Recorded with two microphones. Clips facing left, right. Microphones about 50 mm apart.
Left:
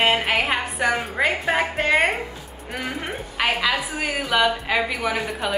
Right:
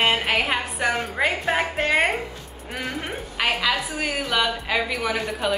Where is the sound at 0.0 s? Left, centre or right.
Centre.